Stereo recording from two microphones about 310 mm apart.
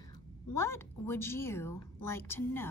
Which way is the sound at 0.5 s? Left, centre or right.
Centre.